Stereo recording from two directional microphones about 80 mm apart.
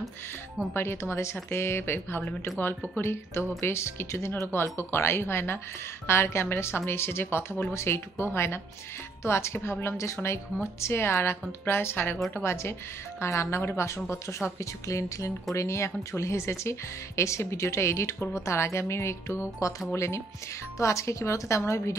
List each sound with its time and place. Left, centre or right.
0.7 s speech: left